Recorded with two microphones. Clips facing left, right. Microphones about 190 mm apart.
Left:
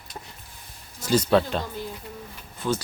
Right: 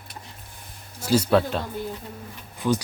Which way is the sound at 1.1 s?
5° right (ahead or behind).